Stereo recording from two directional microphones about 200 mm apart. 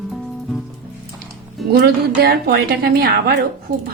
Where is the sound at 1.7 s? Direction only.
55° right (ahead or behind).